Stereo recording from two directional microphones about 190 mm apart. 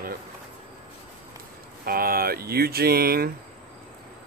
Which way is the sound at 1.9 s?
50° right (ahead or behind).